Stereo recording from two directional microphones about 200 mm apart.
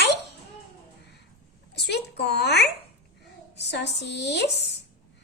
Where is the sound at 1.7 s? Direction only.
55° left (ahead or behind).